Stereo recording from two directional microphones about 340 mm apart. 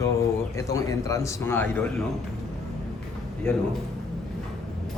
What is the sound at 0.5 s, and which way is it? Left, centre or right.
A man's voice, centre.